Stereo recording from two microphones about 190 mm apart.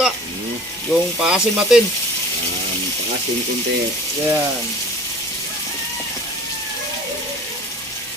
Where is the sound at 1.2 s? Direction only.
5° right (ahead or behind).